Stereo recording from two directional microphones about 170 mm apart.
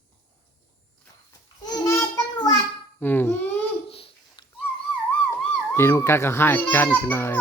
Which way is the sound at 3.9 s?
35° left (ahead or behind).